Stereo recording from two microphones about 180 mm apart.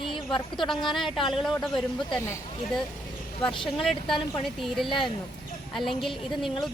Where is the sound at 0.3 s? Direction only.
25° left (ahead or behind).